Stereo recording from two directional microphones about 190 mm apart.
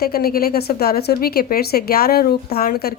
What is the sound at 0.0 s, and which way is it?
A woman's voice, 55° left (ahead or behind).